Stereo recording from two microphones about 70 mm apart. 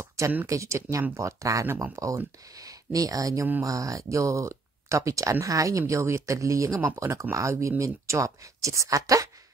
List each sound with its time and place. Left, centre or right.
0.5 s speech: right